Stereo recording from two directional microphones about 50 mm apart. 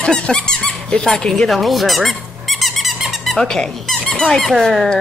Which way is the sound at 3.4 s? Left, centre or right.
Centre.